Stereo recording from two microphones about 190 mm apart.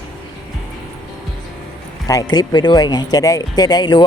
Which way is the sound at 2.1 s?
20° left (ahead or behind).